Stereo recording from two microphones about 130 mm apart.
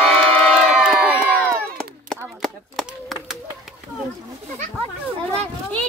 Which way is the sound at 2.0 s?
5° left (ahead or behind).